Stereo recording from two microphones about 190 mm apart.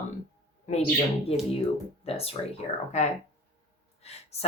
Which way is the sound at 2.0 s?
30° left (ahead or behind).